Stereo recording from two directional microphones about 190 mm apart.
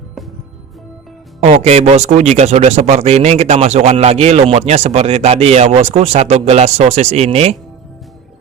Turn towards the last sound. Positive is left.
turn(degrees=-35)  # may be behind; listen again after turning